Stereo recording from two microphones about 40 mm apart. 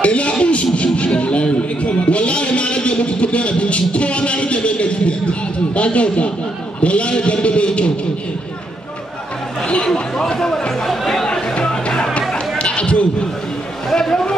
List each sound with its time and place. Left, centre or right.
0.0 s a sound: left
0.9 s music: left
5.8 s speech: left
6.8 s a sound: left
9.9 s speech: centre
11.3 s music: centre
13.9 s speech: centre